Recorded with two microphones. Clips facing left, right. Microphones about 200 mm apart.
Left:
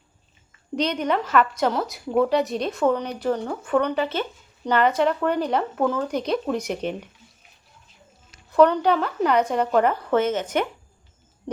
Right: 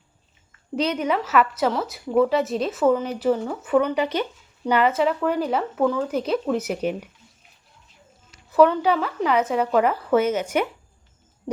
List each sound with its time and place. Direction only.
0.8 s a woman's voice: 5° right (ahead or behind)
8.5 s a woman's voice: 5° right (ahead or behind)